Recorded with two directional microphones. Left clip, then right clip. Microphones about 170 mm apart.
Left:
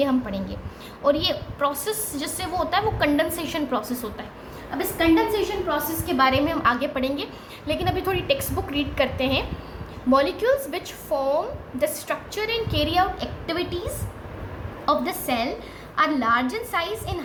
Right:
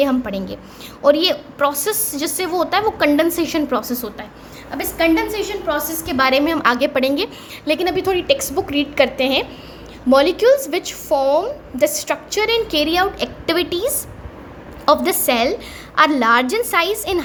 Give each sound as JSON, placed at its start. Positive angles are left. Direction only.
{"t": 0.0, "sound": "a woman's voice", "side_deg": -40}
{"t": 4.7, "sound": "a woman's voice", "side_deg": -55}